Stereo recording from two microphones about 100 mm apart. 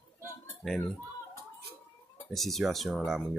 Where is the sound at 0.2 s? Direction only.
30° left (ahead or behind).